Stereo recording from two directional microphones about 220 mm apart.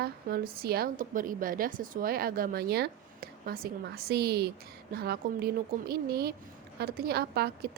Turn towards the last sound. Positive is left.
turn(degrees=-45)  # may be behind; listen again after turning